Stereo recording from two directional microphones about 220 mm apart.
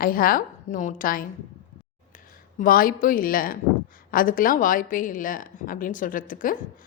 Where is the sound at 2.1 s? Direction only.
40° left (ahead or behind).